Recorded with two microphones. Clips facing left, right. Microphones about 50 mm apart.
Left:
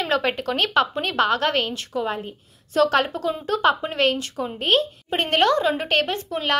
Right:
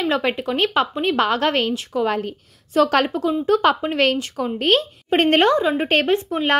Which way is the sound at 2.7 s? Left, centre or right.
Right.